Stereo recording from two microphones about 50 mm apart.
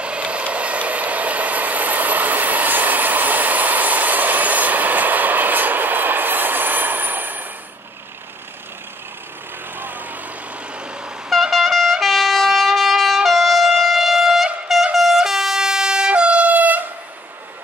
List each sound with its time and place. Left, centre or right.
0.0 s train: right
9.8 s vehicle: right
11.5 s wind instrument: centre
15.0 s a sound: centre; by 16.8 s right